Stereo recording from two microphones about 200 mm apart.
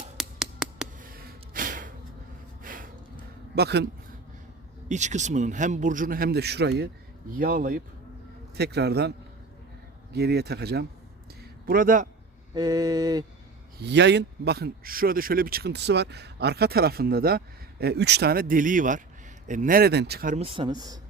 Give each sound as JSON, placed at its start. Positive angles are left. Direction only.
{"t": 0.2, "sound": "a sound", "side_deg": -5}
{"t": 0.9, "sound": "a sound", "side_deg": -45}
{"t": 2.6, "sound": "snort", "side_deg": -45}
{"t": 3.5, "sound": "a man's voice", "side_deg": -55}
{"t": 4.9, "sound": "speech", "side_deg": -35}
{"t": 8.5, "sound": "a man's voice", "side_deg": -55}
{"t": 12.5, "sound": "speech", "side_deg": -20}
{"t": 13.7, "sound": "speech", "side_deg": -60}
{"t": 20.3, "sound": "speech", "side_deg": -30}